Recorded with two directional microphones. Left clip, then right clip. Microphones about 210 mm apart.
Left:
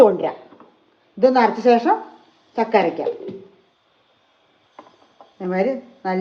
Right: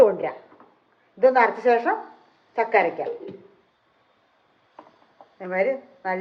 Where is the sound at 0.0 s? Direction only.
40° left (ahead or behind).